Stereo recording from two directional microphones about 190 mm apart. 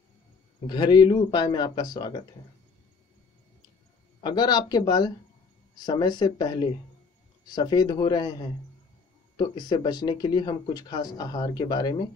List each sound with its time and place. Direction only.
0.7 s speech: 25° left (ahead or behind)
4.2 s speech: 20° left (ahead or behind)